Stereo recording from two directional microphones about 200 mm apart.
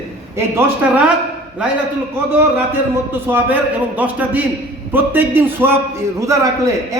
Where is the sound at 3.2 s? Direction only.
10° right (ahead or behind).